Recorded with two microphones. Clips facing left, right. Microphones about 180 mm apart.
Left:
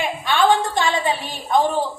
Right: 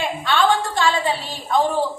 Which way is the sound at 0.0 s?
15° left (ahead or behind).